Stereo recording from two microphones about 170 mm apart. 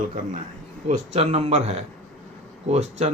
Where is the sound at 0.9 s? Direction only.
35° right (ahead or behind).